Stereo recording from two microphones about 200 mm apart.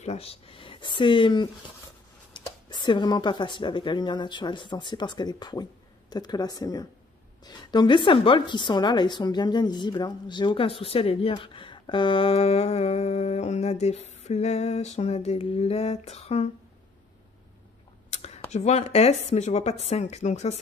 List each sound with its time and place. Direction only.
0.0 s a woman's voice: 30° left (ahead or behind)
18.1 s a sound: 35° left (ahead or behind)
18.5 s speech: 35° left (ahead or behind)